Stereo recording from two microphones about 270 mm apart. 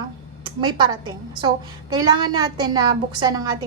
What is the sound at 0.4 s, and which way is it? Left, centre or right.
A woman's voice, centre.